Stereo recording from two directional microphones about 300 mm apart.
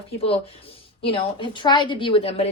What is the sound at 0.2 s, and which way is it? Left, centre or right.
A woman's voice, centre.